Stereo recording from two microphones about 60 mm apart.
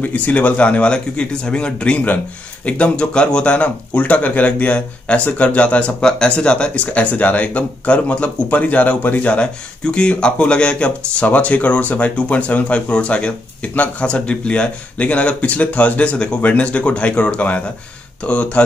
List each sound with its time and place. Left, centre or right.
0.0 s speech: left
9.3 s speech: centre